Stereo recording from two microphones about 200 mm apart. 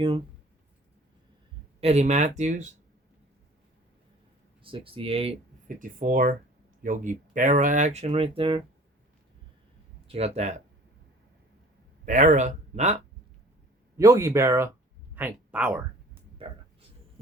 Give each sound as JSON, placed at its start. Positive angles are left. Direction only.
{"t": 1.8, "sound": "speech", "side_deg": -35}
{"t": 4.6, "sound": "speech", "side_deg": -25}
{"t": 5.8, "sound": "speech", "side_deg": -40}
{"t": 10.1, "sound": "speech", "side_deg": -30}
{"t": 12.0, "sound": "speech", "side_deg": -35}
{"t": 13.9, "sound": "speech", "side_deg": -15}
{"t": 16.4, "sound": "speech", "side_deg": -30}